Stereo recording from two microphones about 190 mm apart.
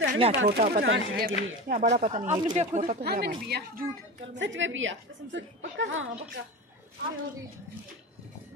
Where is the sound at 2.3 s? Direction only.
25° right (ahead or behind).